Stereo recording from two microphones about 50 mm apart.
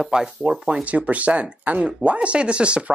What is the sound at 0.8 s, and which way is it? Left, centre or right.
Speech, right.